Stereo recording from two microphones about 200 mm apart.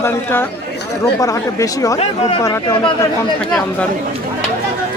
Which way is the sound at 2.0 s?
30° left (ahead or behind).